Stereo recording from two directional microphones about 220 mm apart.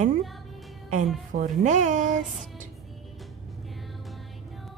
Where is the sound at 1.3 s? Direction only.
35° right (ahead or behind).